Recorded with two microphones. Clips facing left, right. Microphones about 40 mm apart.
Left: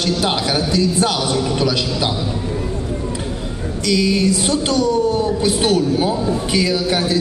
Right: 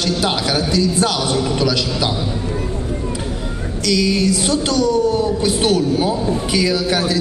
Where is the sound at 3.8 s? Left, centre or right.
Centre.